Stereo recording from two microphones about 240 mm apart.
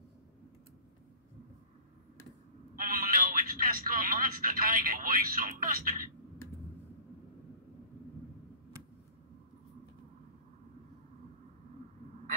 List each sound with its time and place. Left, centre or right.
2.7 s speech: right